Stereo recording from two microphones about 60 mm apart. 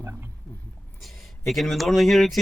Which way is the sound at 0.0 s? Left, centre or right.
Right.